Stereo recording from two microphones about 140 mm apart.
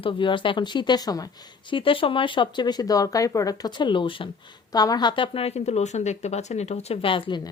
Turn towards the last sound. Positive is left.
turn(degrees=40)  # may be behind; listen again after turning